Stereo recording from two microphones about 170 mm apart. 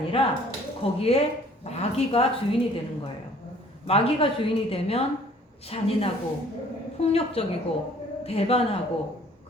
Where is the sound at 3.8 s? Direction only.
35° left (ahead or behind).